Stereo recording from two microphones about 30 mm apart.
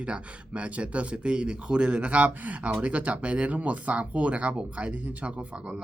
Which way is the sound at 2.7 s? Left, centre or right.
Right.